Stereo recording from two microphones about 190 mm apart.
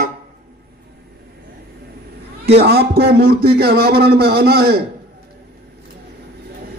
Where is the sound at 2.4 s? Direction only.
60° right (ahead or behind).